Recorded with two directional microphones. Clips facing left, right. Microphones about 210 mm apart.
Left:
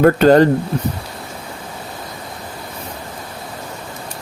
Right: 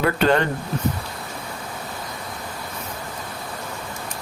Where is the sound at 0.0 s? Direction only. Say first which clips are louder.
Left 9 dB; 40° left (ahead or behind).